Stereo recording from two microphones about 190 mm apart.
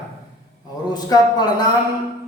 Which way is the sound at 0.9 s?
20° left (ahead or behind).